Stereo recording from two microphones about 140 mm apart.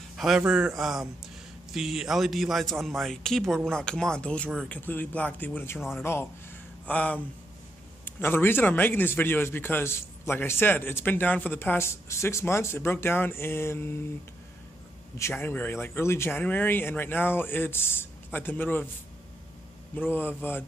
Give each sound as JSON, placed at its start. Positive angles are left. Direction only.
{"t": 0.5, "sound": "a man's voice", "side_deg": -5}
{"t": 15.1, "sound": "a man's voice", "side_deg": 15}
{"t": 20.0, "sound": "a man's voice", "side_deg": 15}